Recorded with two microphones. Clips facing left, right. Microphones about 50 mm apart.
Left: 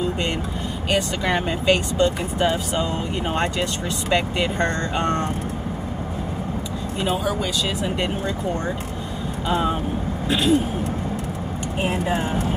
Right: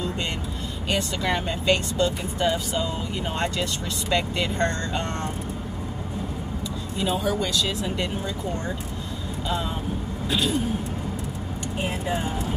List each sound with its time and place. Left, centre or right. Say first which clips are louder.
0.8 s speech: left 3 dB; centre
4.1 s speech: left 3 dB; left
7.6 s speech: left 3 dB; left
9.5 s speech: left 7 dB; left
10.2 s vehicle: left 6 dB; left
11.8 s speech: left 5 dB; left